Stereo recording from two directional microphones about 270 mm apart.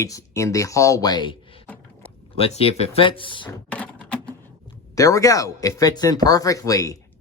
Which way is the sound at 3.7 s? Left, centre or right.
Centre.